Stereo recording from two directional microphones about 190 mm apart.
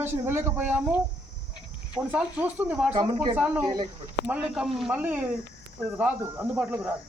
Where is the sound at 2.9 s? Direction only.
20° right (ahead or behind).